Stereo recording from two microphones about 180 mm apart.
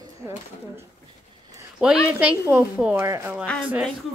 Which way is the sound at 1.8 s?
5° right (ahead or behind).